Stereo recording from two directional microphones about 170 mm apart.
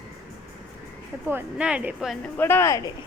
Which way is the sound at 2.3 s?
15° left (ahead or behind).